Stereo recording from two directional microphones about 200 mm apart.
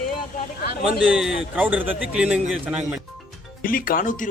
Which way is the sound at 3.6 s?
45° left (ahead or behind).